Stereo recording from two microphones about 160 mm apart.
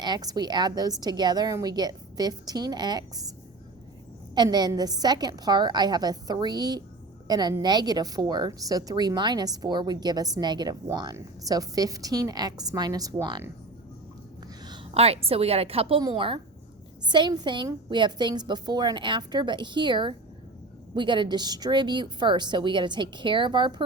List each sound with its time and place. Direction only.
0.0 s a woman's voice: 25° right (ahead or behind)
4.4 s a woman's voice: 25° right (ahead or behind)
14.9 s a woman's voice: 40° right (ahead or behind)